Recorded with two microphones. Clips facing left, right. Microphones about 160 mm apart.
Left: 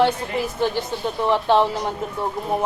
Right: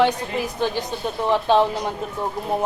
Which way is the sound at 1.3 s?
15° right (ahead or behind).